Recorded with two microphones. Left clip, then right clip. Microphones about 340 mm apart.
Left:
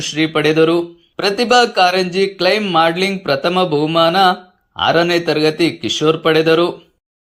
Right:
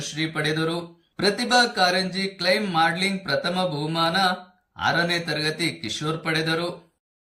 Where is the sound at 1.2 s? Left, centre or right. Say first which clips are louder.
Left 7 dB; left.